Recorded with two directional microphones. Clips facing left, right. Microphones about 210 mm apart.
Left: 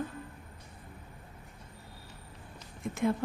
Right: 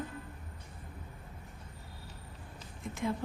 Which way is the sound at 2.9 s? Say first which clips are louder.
Left 5 dB; 50° left (ahead or behind).